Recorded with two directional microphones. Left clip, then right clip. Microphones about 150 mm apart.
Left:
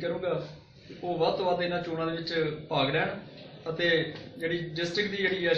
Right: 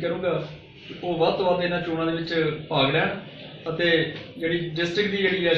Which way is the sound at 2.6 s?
Centre (ahead or behind).